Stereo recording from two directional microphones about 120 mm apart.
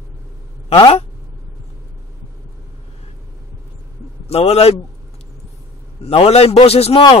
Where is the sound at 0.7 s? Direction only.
50° left (ahead or behind).